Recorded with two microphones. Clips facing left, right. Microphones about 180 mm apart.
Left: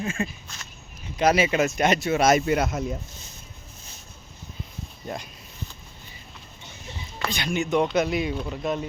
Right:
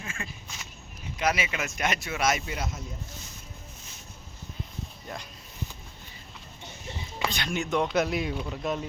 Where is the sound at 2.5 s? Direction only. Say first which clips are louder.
Left 12 dB; 65° left (ahead or behind).